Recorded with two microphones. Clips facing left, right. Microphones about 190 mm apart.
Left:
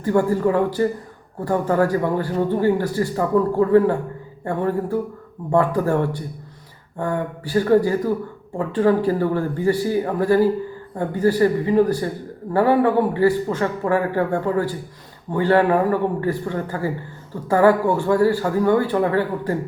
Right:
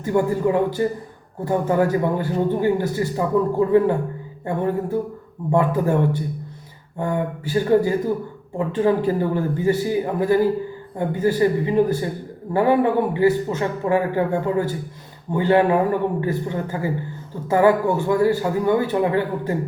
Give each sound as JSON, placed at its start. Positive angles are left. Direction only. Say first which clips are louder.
{"t": 0.0, "sound": "a man's voice", "louder": "left 1 dB", "side_deg": -15}
{"t": 7.0, "sound": "a man's voice", "louder": "right 1 dB", "side_deg": -20}